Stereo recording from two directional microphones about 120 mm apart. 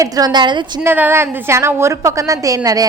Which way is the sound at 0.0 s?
35° right (ahead or behind).